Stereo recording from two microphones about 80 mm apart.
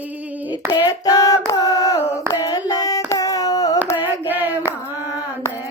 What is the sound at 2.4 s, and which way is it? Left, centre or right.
Hands, left.